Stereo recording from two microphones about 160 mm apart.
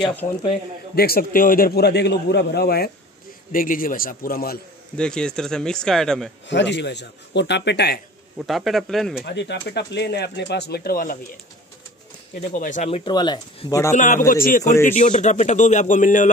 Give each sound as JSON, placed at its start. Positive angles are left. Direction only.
{"t": 0.9, "sound": "a man's voice", "side_deg": 70}
{"t": 3.5, "sound": "a man's voice", "side_deg": 60}
{"t": 4.9, "sound": "speech", "side_deg": 5}
{"t": 6.4, "sound": "speech", "side_deg": 90}
{"t": 8.4, "sound": "speech", "side_deg": 0}
{"t": 9.2, "sound": "speech", "side_deg": 90}
{"t": 12.4, "sound": "a man's voice", "side_deg": 50}
{"t": 13.0, "sound": "speech", "side_deg": 25}
{"t": 13.9, "sound": "a man's voice", "side_deg": 50}